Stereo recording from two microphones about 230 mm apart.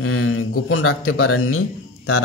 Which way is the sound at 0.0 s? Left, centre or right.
Left.